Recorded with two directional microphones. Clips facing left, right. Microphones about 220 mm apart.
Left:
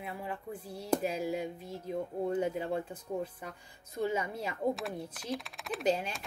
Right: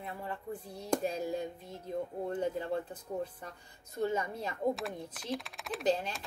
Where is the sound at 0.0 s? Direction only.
10° left (ahead or behind).